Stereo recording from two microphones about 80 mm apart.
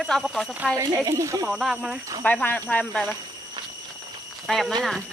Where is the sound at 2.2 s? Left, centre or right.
Centre.